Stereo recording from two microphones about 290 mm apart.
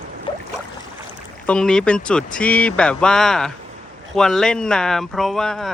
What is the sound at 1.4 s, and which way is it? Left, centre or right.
Speech, centre.